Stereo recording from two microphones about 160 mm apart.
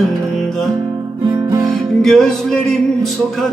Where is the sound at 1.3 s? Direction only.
25° right (ahead or behind).